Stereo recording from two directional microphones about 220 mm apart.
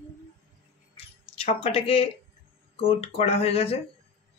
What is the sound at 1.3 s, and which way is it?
Speech, 25° left (ahead or behind).